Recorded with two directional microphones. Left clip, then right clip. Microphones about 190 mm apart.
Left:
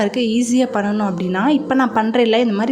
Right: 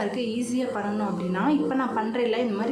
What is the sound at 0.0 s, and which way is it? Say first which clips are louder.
A woman's voice: left 10 dB; 40° left (ahead or behind).